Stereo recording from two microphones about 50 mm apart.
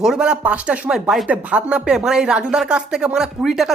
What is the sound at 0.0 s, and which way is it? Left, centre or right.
Speech, centre.